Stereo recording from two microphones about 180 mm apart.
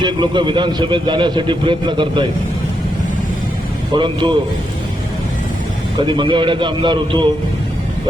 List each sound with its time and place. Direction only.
0.0 s a man's voice: 25° right (ahead or behind)
3.9 s a man's voice: 25° right (ahead or behind)
6.0 s a man's voice: 25° right (ahead or behind)